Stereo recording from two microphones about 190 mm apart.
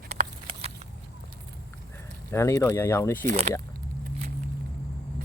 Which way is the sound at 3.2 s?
40° right (ahead or behind).